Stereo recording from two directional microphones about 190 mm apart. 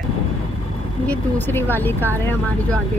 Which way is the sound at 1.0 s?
10° left (ahead or behind).